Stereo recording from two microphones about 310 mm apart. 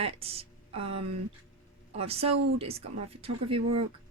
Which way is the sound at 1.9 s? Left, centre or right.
Centre.